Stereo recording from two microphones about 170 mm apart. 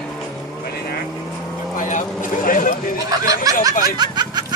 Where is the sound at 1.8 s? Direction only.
50° left (ahead or behind).